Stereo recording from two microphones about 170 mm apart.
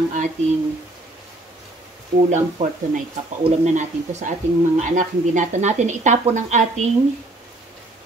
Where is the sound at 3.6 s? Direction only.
45° right (ahead or behind).